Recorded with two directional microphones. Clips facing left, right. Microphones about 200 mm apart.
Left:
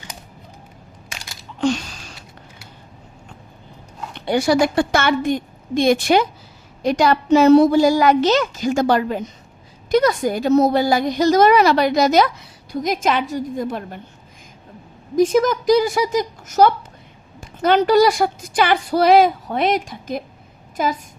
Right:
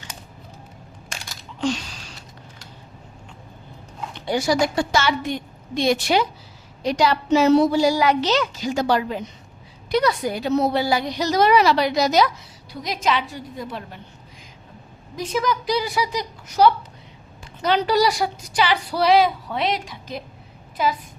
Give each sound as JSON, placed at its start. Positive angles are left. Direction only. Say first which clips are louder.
{"t": 1.6, "sound": "a sound", "louder": "left 4 dB", "side_deg": 50}
{"t": 4.3, "sound": "a woman's voice", "louder": "left 4 dB", "side_deg": 60}
{"t": 15.1, "sound": "a woman's voice", "louder": "left 8 dB", "side_deg": 45}